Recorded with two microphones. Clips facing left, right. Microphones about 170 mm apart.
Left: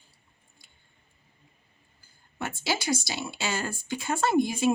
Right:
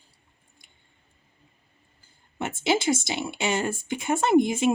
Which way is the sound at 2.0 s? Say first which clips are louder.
Right 3 dB; 20° right (ahead or behind).